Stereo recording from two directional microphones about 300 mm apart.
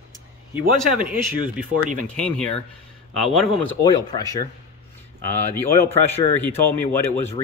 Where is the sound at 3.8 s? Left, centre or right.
Centre.